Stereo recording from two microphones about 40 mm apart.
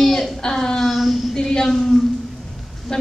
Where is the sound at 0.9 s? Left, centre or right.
Centre.